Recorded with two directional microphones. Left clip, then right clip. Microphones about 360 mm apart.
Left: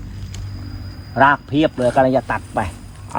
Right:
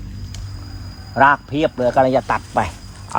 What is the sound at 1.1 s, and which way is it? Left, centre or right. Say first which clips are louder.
Speech: even; centre.